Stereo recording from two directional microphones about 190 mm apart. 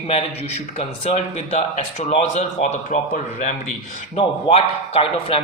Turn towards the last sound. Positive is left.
turn(degrees=30)  # may be behind; listen again after turning